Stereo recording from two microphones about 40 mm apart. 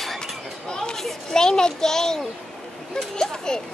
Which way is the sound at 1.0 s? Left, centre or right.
Centre.